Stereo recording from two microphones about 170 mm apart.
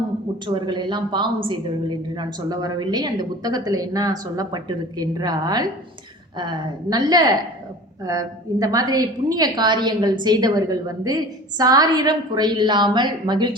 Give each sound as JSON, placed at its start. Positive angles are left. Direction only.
{"t": 0.4, "sound": "a woman's voice", "side_deg": -25}